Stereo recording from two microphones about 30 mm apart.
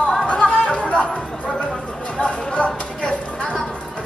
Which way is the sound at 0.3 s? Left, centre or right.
Left.